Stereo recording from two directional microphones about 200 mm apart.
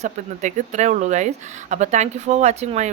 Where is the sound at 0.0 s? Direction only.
35° right (ahead or behind).